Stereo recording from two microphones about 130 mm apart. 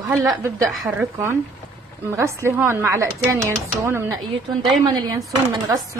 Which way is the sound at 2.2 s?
20° right (ahead or behind).